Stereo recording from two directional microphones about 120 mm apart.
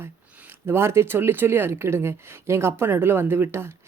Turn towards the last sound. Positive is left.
turn(degrees=-20)  # may be behind; listen again after turning